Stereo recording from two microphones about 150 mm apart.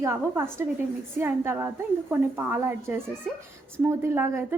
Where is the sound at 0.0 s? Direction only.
15° right (ahead or behind).